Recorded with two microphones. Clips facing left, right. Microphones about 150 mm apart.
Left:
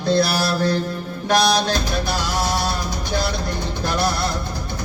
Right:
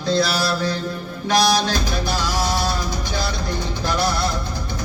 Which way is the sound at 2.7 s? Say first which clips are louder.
Even; 55° left (ahead or behind).